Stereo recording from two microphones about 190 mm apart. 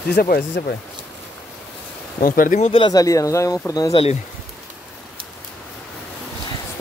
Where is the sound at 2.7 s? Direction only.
20° left (ahead or behind).